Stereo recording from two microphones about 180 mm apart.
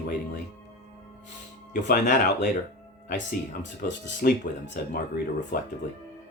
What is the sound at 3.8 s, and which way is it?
Speech, 50° left (ahead or behind).